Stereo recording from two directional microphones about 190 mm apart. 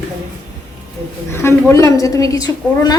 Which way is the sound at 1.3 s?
15° left (ahead or behind).